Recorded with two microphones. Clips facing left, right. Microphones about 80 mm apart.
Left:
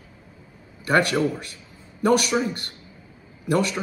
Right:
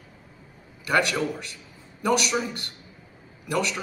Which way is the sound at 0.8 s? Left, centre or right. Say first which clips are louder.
Left 3 dB; left.